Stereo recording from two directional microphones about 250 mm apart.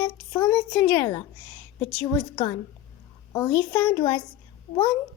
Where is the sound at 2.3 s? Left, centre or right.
Centre.